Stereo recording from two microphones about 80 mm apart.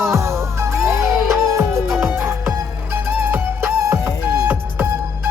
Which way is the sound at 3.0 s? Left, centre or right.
Right.